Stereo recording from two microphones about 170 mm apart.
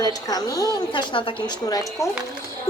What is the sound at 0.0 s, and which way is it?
A woman's voice, 20° left (ahead or behind).